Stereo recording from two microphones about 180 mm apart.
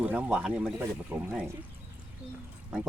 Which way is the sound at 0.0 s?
10° right (ahead or behind).